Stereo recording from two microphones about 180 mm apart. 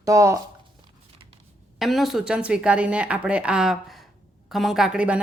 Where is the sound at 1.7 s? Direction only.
Centre (ahead or behind).